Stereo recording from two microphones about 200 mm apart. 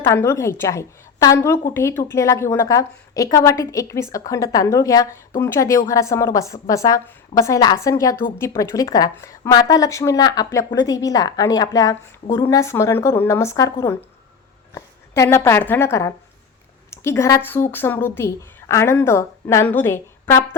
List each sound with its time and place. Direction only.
0.0 s a woman's voice: 10° left (ahead or behind)